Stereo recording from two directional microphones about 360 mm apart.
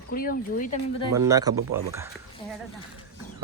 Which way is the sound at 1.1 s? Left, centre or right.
Centre.